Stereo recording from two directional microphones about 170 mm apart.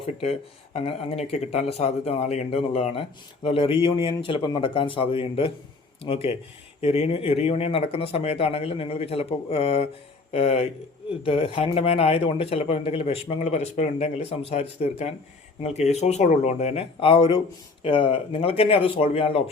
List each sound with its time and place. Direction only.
0.0 s a man's voice: 35° left (ahead or behind)